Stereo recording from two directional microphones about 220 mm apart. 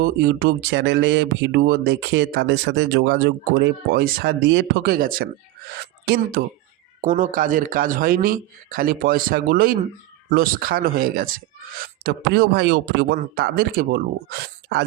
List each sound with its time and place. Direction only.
0.0 s speech: 45° right (ahead or behind)
6.4 s speech: 45° right (ahead or behind)
7.0 s a man's voice: 35° right (ahead or behind)